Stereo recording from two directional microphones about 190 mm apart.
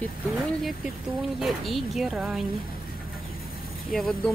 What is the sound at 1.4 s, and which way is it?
Speech, centre (ahead or behind).